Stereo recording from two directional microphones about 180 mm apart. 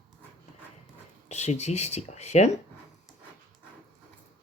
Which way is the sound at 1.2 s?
40° left (ahead or behind).